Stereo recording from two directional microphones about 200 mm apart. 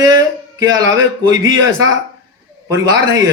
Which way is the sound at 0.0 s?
20° right (ahead or behind).